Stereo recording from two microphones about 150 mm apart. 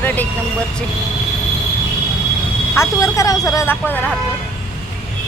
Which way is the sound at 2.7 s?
20° left (ahead or behind).